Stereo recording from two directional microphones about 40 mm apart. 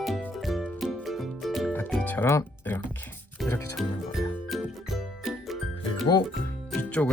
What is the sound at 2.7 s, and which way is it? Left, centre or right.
Music, left.